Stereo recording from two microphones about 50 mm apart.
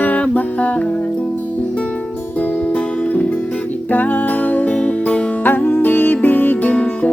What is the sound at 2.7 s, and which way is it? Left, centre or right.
Music, left.